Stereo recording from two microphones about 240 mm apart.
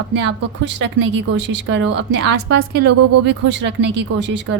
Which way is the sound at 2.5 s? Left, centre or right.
Right.